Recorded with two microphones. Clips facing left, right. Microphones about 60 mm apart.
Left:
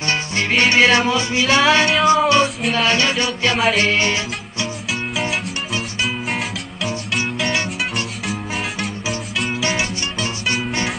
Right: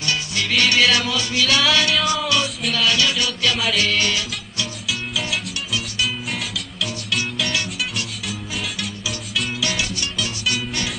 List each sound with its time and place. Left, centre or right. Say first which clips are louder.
0.0 s music: left 3 dB; left
9.6 s music: left 3 dB; left